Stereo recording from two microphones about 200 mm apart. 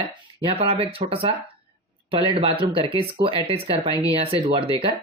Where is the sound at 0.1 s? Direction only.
25° right (ahead or behind).